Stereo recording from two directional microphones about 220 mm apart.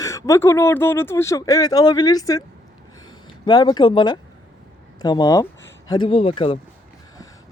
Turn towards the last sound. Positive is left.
turn(degrees=25)  # may be behind; listen again after turning